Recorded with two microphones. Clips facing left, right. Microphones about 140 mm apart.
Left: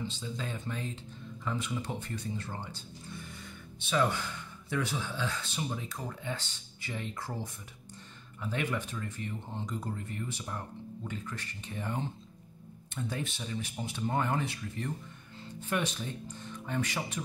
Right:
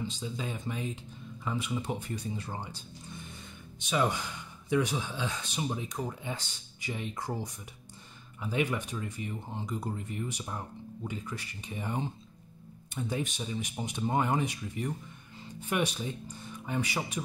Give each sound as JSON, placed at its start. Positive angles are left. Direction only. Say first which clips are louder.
{"t": 0.1, "sound": "speech", "louder": "right 2 dB", "side_deg": -15}